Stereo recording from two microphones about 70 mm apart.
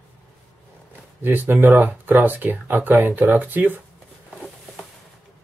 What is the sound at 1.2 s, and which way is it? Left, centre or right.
Speech, right.